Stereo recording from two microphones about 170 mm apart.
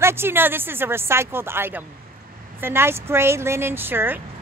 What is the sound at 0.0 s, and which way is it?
Speech, 15° right (ahead or behind).